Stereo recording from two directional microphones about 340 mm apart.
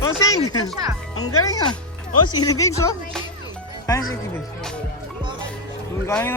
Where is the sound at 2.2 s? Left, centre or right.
Centre.